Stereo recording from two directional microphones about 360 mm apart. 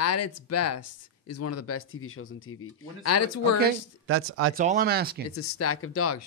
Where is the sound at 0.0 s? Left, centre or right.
Left.